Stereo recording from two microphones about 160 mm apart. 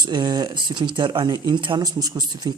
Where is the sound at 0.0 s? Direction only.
25° right (ahead or behind).